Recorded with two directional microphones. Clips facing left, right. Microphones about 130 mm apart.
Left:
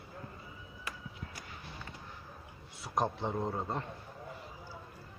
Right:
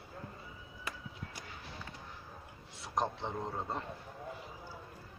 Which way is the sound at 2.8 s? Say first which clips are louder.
Left 2 dB; 5° left (ahead or behind).